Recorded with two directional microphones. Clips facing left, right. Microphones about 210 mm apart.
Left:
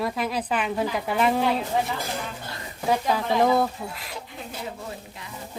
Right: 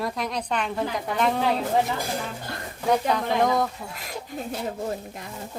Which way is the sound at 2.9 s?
5° left (ahead or behind).